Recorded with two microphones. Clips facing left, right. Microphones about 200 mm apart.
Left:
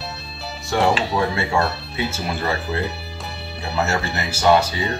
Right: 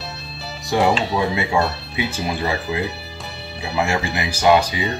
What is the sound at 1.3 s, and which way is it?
Speech, 20° right (ahead or behind).